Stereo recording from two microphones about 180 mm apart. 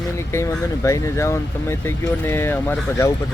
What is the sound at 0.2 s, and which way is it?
Speech, 15° left (ahead or behind).